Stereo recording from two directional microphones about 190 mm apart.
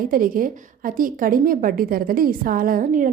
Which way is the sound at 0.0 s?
50° right (ahead or behind).